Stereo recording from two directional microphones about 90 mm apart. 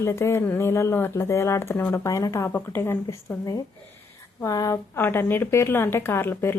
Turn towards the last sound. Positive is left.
turn(degrees=25)  # may be behind; listen again after turning